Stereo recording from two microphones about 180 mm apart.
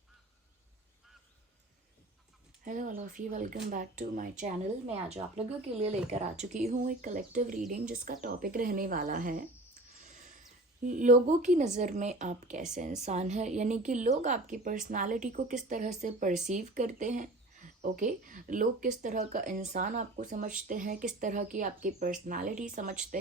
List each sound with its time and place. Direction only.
2.6 s speech: 45° right (ahead or behind)
10.0 s a sound: 45° right (ahead or behind)
10.8 s speech: 45° right (ahead or behind)